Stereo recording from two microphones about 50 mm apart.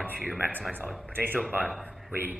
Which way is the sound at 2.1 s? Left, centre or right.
Right.